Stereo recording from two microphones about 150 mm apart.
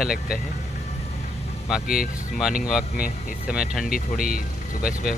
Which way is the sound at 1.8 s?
75° left (ahead or behind).